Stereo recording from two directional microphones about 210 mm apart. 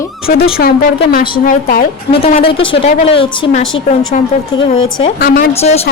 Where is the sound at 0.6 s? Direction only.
50° left (ahead or behind).